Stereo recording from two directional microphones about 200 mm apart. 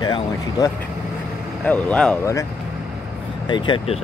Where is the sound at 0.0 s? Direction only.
20° left (ahead or behind).